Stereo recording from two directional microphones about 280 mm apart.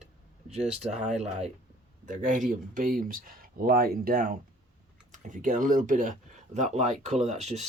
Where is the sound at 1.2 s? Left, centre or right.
Right.